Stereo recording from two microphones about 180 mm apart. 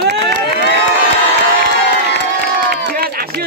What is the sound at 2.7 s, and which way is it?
Run, 55° right (ahead or behind).